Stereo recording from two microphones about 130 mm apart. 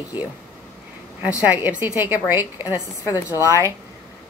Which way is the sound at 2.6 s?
25° left (ahead or behind).